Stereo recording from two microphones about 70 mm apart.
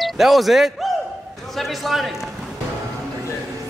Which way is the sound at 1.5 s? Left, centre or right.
Centre.